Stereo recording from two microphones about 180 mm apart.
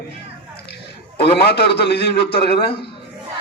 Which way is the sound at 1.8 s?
65° left (ahead or behind).